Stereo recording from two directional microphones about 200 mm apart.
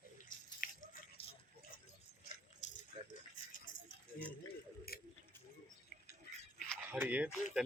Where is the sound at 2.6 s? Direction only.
35° left (ahead or behind).